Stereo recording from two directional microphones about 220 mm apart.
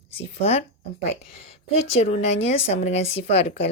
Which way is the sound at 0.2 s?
30° left (ahead or behind).